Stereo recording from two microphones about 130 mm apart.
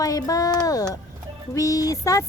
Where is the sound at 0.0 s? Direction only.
25° left (ahead or behind).